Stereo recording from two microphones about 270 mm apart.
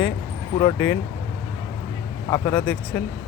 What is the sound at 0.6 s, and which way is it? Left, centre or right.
Speech, centre.